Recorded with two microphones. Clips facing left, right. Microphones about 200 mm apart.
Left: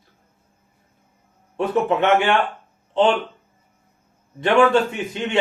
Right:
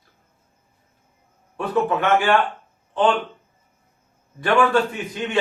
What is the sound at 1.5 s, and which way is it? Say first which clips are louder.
A man's voice: left 2 dB; 25° left (ahead or behind).